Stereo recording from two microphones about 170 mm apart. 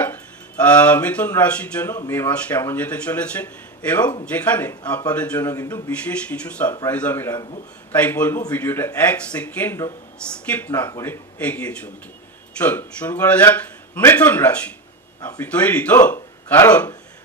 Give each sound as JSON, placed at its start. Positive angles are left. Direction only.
{"t": 0.0, "sound": "speech", "side_deg": 10}